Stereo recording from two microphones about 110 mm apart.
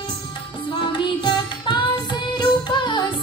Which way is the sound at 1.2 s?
45° left (ahead or behind).